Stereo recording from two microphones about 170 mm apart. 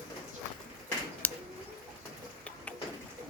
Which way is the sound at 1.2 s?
10° left (ahead or behind).